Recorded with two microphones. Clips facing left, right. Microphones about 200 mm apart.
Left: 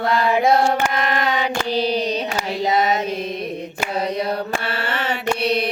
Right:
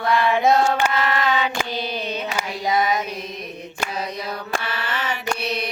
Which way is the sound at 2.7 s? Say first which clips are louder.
Left 1 dB; 25° left (ahead or behind).